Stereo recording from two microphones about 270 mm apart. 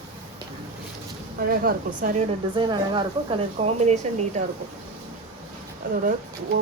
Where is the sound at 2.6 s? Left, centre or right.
Centre.